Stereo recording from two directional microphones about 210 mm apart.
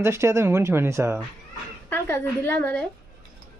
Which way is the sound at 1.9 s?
10° left (ahead or behind).